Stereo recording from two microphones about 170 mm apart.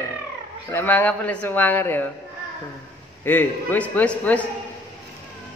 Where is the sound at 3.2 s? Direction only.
10° left (ahead or behind).